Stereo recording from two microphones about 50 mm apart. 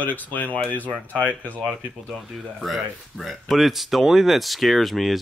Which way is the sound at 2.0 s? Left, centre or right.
Centre.